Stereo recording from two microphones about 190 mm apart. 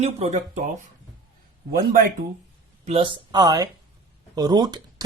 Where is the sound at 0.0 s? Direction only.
35° right (ahead or behind).